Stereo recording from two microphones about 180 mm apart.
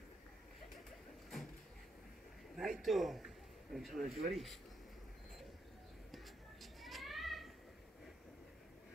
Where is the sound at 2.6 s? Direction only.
Centre (ahead or behind).